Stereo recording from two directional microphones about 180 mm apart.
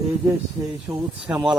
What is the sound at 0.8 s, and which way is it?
Speech, 5° right (ahead or behind).